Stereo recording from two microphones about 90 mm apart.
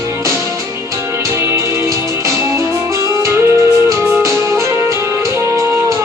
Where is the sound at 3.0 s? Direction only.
30° right (ahead or behind).